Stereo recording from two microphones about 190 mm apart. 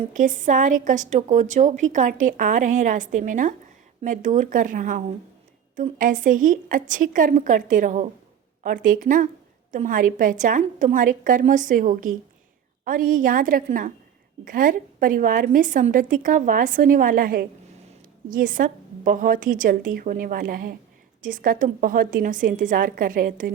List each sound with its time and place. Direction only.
0.1 s a woman's voice: 40° right (ahead or behind)